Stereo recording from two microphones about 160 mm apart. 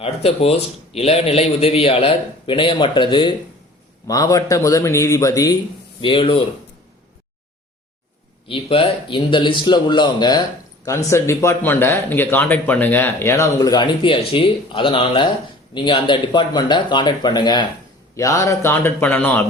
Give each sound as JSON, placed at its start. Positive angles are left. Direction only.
{"t": 0.0, "sound": "a man's voice", "side_deg": 40}
{"t": 6.0, "sound": "a man's voice", "side_deg": 30}
{"t": 8.4, "sound": "speech", "side_deg": 35}